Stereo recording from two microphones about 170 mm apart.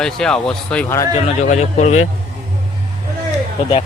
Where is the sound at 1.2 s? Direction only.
40° left (ahead or behind).